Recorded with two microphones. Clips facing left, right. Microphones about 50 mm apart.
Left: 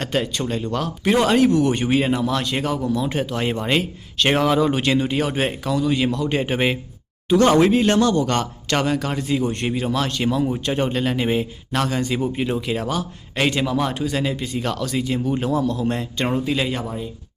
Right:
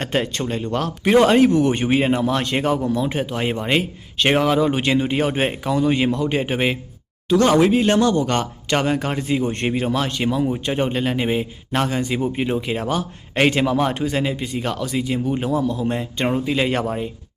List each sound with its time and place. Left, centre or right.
0.0 s speech: right
3.1 s speech: centre
6.2 s speech: centre; by 9.9 s right
9.9 s speech: centre
11.7 s speech: right
11.9 s speech: centre
12.2 s speech: right
14.3 s speech: centre
16.6 s speech: right